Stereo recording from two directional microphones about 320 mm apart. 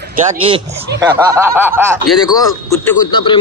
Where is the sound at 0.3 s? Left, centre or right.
Centre.